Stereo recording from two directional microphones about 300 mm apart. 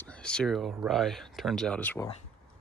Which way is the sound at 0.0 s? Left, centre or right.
Centre.